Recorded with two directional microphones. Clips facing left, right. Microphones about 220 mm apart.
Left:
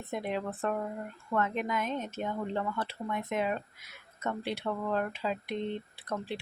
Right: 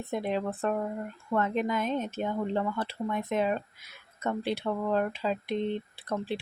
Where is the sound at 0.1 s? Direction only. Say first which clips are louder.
Right 3 dB; 30° right (ahead or behind).